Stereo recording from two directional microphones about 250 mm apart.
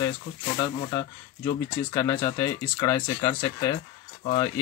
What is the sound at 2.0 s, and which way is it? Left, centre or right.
Speech, centre.